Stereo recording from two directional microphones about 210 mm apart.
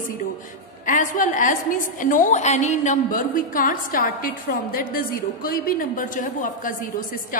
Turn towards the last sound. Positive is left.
turn(degrees=40)  # may be behind; listen again after turning